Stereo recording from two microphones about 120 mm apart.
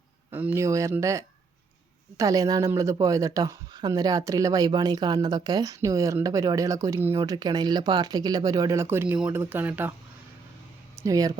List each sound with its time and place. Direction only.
0.3 s speech: 15° right (ahead or behind)
11.0 s speech: 30° right (ahead or behind)